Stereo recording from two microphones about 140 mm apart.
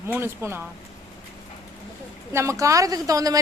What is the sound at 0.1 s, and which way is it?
Speech, 15° right (ahead or behind).